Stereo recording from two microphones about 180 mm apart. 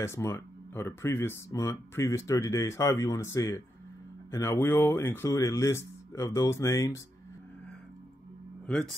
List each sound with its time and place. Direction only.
0.0 s speech: 15° left (ahead or behind)
8.6 s speech: 5° left (ahead or behind)